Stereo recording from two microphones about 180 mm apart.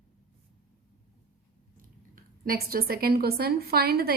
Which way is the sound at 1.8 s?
55° right (ahead or behind).